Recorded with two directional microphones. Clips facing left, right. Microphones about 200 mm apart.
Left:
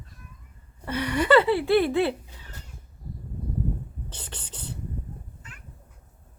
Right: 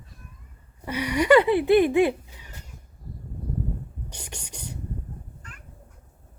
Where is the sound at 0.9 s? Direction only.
10° right (ahead or behind).